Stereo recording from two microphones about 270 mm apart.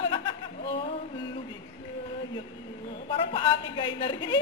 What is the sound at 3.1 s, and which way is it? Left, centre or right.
Speech, centre.